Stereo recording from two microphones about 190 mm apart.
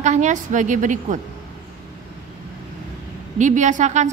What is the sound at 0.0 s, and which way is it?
A woman's voice, 40° right (ahead or behind).